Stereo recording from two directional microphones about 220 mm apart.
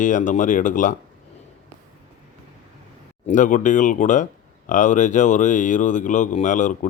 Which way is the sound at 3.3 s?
35° left (ahead or behind).